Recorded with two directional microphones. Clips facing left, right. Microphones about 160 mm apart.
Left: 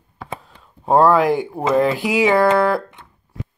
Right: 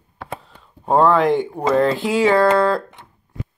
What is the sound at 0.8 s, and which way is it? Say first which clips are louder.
Speech: left 1 dB; 5° left (ahead or behind).